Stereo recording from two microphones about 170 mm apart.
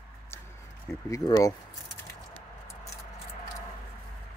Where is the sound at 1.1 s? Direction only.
20° left (ahead or behind).